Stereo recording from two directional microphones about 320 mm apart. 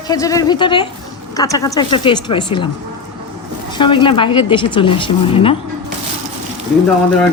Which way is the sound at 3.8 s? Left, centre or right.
Centre.